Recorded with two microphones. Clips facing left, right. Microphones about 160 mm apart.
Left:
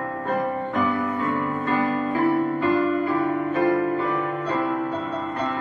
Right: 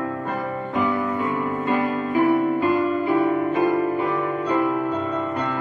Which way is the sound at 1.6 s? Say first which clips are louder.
Even; 15° right (ahead or behind).